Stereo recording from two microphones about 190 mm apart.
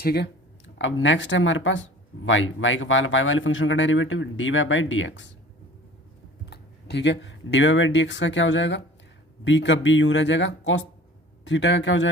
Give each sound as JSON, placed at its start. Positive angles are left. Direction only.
{"t": 0.0, "sound": "speech", "side_deg": 55}
{"t": 0.8, "sound": "speech", "side_deg": 80}
{"t": 2.2, "sound": "speech", "side_deg": 90}
{"t": 6.4, "sound": "speech", "side_deg": 60}